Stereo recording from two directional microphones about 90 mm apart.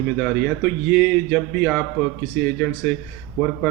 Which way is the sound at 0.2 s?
20° left (ahead or behind).